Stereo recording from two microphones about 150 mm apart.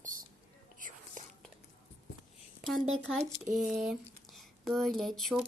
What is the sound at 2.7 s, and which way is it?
Speech, 5° left (ahead or behind).